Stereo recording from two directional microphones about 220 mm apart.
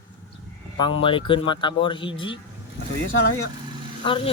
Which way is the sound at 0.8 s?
20° left (ahead or behind).